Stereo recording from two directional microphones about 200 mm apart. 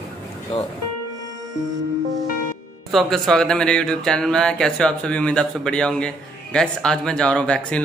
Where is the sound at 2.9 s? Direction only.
Centre (ahead or behind).